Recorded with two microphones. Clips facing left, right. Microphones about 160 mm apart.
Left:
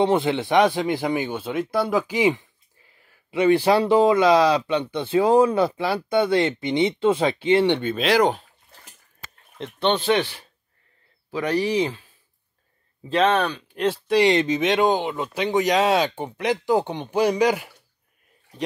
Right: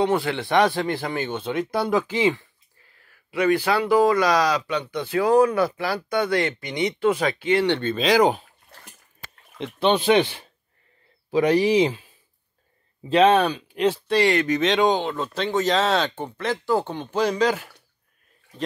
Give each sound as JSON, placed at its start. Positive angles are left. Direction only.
{"t": 0.0, "sound": "speech", "side_deg": 20}
{"t": 3.3, "sound": "speech", "side_deg": 25}
{"t": 7.9, "sound": "speech", "side_deg": 0}
{"t": 9.6, "sound": "speech", "side_deg": -10}
{"t": 13.1, "sound": "speech", "side_deg": -10}
{"t": 13.7, "sound": "speech", "side_deg": 0}
{"t": 14.1, "sound": "speech", "side_deg": 20}